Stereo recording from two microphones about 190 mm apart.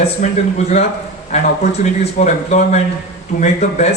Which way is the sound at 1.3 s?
35° left (ahead or behind).